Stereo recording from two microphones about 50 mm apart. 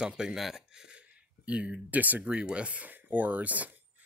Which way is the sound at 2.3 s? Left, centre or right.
Right.